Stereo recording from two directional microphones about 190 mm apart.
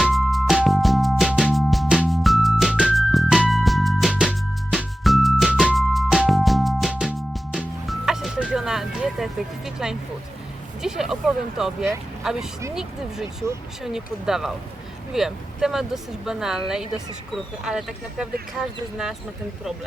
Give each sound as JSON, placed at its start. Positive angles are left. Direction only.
{"t": 0.0, "sound": "music", "side_deg": 0}
{"t": 10.8, "sound": "a sound", "side_deg": 0}
{"t": 12.2, "sound": "speech", "side_deg": -5}
{"t": 13.4, "sound": "speech", "side_deg": -15}
{"t": 13.8, "sound": "speech", "side_deg": 0}